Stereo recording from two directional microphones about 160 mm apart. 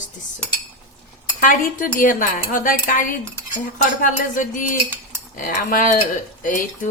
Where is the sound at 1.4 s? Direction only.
55° left (ahead or behind).